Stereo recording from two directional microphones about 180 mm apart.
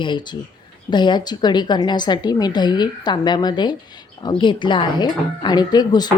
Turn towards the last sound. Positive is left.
turn(degrees=25)  # may be behind; listen again after turning